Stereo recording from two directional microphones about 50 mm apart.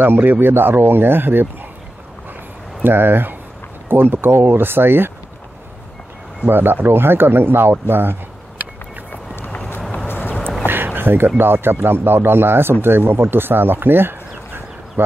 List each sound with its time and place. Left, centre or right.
0.0 s a man's voice: right
2.8 s a man's voice: right
6.4 s a man's voice: right
9.1 s vehicle: left
9.8 s a sound: centre
10.0 s a sound: left
11.0 s a man's voice: right